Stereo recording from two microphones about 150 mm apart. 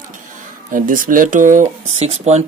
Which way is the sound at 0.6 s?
65° right (ahead or behind).